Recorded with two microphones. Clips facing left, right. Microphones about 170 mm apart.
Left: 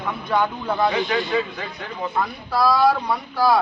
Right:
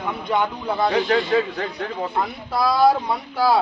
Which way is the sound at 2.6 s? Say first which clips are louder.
Right 1 dB; 20° right (ahead or behind).